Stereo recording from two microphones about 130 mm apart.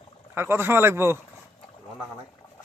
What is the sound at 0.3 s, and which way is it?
Speech, 20° right (ahead or behind).